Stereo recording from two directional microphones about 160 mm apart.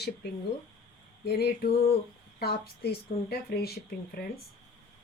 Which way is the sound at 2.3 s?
80° left.